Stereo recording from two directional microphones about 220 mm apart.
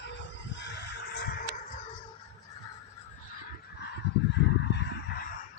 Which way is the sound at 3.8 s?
50° left (ahead or behind).